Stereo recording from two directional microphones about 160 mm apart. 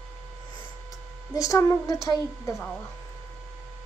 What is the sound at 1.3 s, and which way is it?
A woman's voice, 20° left (ahead or behind).